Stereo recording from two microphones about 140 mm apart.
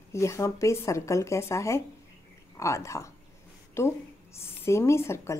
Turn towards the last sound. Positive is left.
turn(degrees=20)  # may be behind; listen again after turning